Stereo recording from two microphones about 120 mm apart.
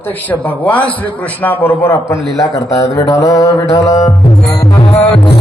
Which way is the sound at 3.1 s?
35° left (ahead or behind).